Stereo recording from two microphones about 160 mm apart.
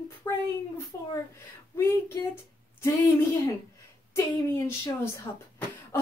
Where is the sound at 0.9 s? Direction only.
15° left (ahead or behind).